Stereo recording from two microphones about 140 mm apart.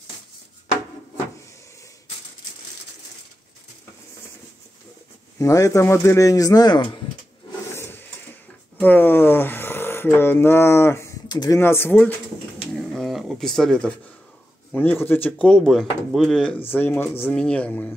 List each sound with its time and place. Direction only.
5.4 s speech: 25° left (ahead or behind)
7.7 s wood: 15° left (ahead or behind)
8.7 s speech: 15° left (ahead or behind)
11.2 s speech: 30° left (ahead or behind)
11.6 s speech: 15° left (ahead or behind)
12.7 s a sound: centre (ahead or behind)
14.7 s speech: 10° left (ahead or behind)